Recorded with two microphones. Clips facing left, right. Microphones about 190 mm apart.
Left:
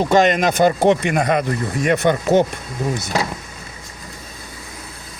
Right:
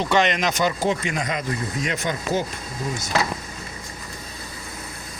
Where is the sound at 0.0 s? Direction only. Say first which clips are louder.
Left 6 dB; 45° left (ahead or behind); by 2.5 s 65° left (ahead or behind).